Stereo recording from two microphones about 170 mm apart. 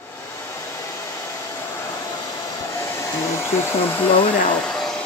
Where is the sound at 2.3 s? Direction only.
15° left (ahead or behind).